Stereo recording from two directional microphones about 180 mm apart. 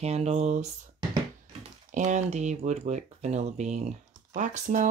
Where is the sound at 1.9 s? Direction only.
40° right (ahead or behind).